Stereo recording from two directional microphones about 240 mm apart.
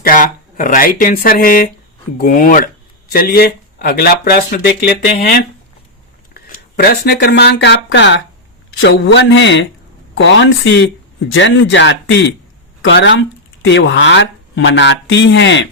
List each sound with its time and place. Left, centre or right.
0.0 s speech: left
6.3 s speech: left